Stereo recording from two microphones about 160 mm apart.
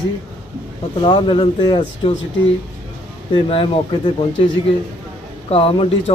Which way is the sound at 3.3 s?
35° left (ahead or behind).